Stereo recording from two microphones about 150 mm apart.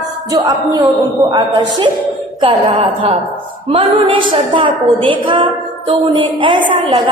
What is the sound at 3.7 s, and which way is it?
A woman's voice, 35° right (ahead or behind).